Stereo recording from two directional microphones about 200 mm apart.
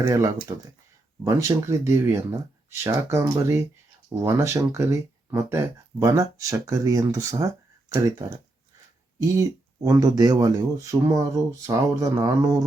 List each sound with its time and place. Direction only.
0.0 s speech: 15° right (ahead or behind)